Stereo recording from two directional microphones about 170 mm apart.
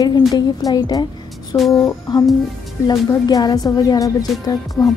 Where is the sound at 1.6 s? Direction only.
Centre (ahead or behind).